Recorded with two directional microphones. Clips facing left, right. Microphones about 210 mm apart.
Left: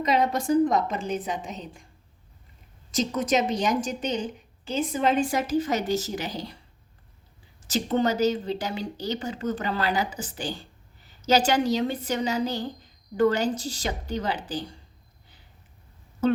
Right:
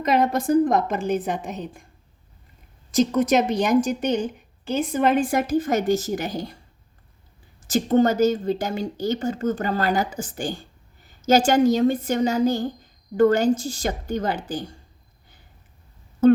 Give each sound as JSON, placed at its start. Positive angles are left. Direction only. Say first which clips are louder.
{"t": 0.0, "sound": "a woman's voice", "louder": "right 3 dB", "side_deg": -55}
{"t": 2.9, "sound": "a woman's voice", "louder": "right 6 dB", "side_deg": -55}
{"t": 7.7, "sound": "speech", "louder": "right 6 dB", "side_deg": -45}